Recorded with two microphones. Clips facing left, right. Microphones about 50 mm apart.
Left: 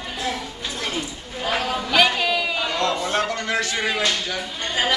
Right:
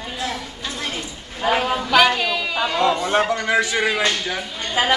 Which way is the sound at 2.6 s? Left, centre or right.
Centre.